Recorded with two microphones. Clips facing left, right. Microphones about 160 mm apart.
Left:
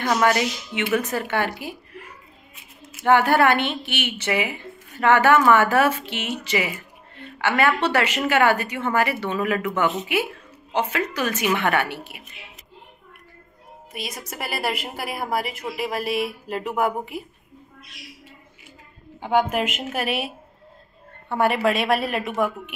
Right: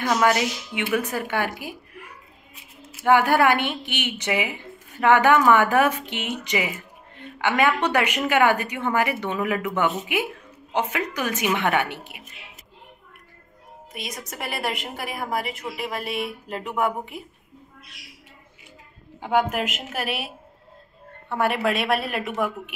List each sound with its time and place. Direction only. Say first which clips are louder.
0.0 s a woman's voice: left 1 dB; 5° right (ahead or behind)
13.9 s a woman's voice: left 2 dB; centre (ahead or behind)
19.2 s a woman's voice: left 1 dB; centre (ahead or behind)
21.3 s a woman's voice: left 2 dB; centre (ahead or behind)